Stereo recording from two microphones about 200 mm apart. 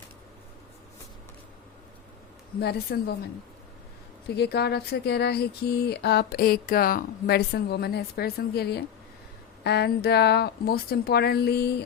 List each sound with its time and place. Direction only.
2.6 s a woman's voice: 50° left (ahead or behind)
4.4 s a woman's voice: 55° left (ahead or behind)